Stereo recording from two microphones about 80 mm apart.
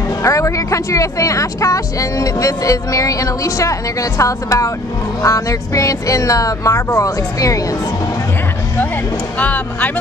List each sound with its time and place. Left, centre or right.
0.2 s speech: left
9.4 s speech: centre